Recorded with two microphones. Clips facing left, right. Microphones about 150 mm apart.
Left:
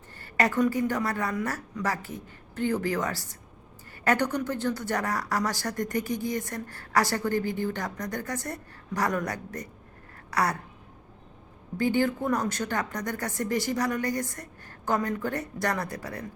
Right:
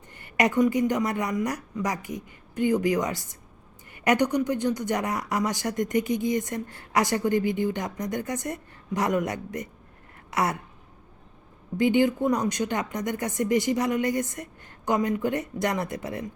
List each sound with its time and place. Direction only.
0.2 s a woman's voice: 20° right (ahead or behind)
11.8 s a woman's voice: 20° right (ahead or behind)